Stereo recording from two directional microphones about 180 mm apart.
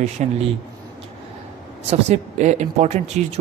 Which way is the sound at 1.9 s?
40° right (ahead or behind).